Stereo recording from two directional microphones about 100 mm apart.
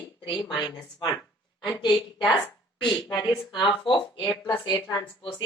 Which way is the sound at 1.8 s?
50° left (ahead or behind).